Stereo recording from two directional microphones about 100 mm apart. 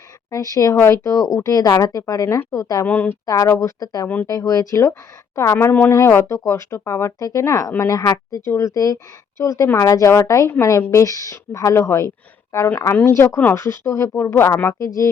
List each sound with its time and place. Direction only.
0.3 s speech: 35° left (ahead or behind)
2.8 s speech: 15° left (ahead or behind)
3.2 s speech: 35° left (ahead or behind)
5.7 s speech: 20° left (ahead or behind)